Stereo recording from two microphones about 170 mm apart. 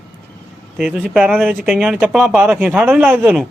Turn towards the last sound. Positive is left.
turn(degrees=-10)  # may be behind; listen again after turning